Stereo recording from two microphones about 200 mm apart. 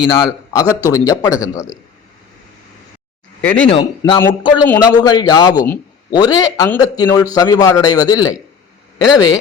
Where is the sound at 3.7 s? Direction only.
25° left (ahead or behind).